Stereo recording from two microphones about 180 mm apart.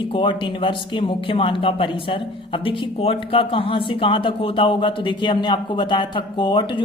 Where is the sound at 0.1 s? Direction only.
25° left (ahead or behind).